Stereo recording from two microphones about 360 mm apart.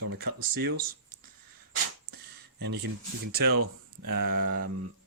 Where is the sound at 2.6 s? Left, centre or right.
Right.